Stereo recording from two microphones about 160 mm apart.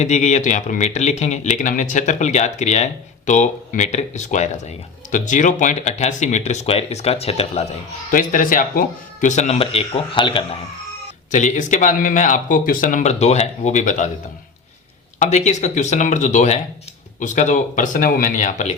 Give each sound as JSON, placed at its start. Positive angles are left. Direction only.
{"t": 0.0, "sound": "speech", "side_deg": 45}
{"t": 8.1, "sound": "speech", "side_deg": 55}
{"t": 9.2, "sound": "speech", "side_deg": 45}
{"t": 11.3, "sound": "speech", "side_deg": 50}
{"t": 15.2, "sound": "speech", "side_deg": 45}